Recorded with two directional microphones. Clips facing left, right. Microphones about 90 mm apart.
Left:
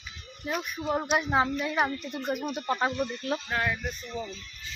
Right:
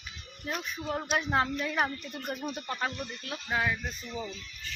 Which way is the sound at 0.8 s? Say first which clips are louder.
Left 4 dB; 20° left (ahead or behind).